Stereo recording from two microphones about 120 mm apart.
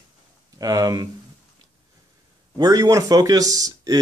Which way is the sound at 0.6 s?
30° right (ahead or behind).